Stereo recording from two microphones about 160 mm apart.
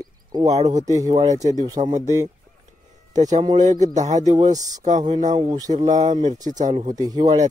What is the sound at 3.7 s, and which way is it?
Speech, 50° right (ahead or behind).